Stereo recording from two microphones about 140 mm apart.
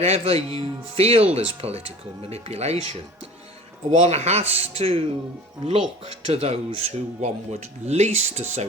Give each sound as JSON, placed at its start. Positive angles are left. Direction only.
{"t": 0.0, "sound": "speech", "side_deg": -50}